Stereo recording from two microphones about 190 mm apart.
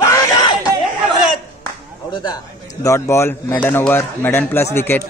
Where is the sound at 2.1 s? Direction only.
20° left (ahead or behind).